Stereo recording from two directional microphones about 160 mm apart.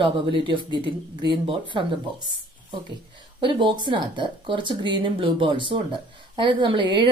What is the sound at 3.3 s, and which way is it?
Speech, 30° right (ahead or behind).